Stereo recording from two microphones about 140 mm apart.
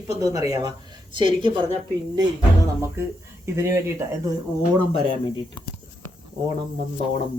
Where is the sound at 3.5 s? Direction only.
20° right (ahead or behind).